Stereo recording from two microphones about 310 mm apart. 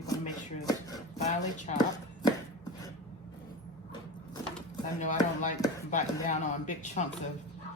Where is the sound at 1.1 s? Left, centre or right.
Left.